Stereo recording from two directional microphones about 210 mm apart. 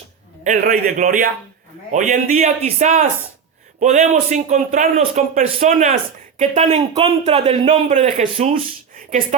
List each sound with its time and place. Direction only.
0.4 s speech: 40° right (ahead or behind)